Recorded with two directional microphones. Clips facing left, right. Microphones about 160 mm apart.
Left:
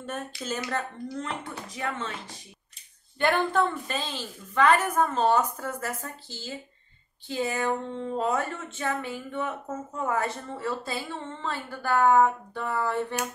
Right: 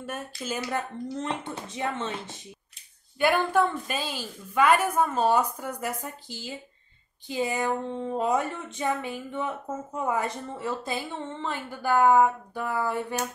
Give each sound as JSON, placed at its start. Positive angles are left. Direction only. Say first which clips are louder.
{"t": 0.0, "sound": "a woman's voice", "louder": "even", "side_deg": -10}
{"t": 1.1, "sound": "speech", "louder": "right 3 dB", "side_deg": -25}
{"t": 3.2, "sound": "a woman's voice", "louder": "right 1 dB", "side_deg": -10}